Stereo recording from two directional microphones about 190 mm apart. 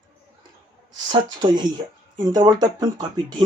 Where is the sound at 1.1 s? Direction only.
20° right (ahead or behind).